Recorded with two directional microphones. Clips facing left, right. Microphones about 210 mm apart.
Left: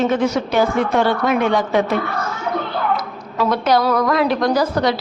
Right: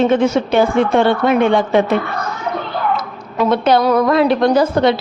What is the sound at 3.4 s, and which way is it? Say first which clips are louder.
Speech: right 3 dB; 25° right (ahead or behind).